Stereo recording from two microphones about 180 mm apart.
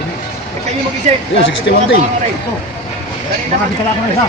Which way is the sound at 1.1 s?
40° right (ahead or behind).